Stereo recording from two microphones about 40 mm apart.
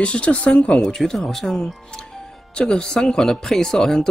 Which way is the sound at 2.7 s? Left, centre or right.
Centre.